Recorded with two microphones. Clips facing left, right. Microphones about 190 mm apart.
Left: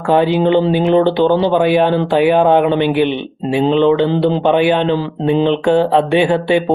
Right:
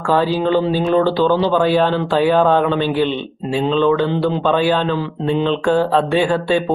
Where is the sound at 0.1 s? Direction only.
20° left (ahead or behind).